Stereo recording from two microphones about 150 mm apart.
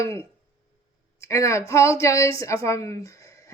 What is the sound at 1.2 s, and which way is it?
Speech, 20° left (ahead or behind).